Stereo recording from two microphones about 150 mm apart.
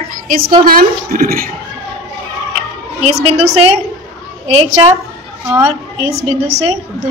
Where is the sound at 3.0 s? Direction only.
45° right (ahead or behind).